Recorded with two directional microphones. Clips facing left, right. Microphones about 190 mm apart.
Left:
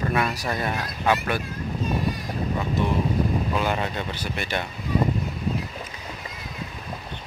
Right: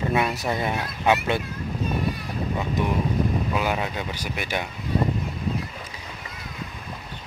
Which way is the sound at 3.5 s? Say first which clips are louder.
Even; 5° right (ahead or behind).